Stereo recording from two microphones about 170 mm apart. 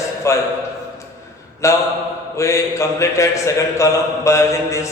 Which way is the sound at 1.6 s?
15° left (ahead or behind).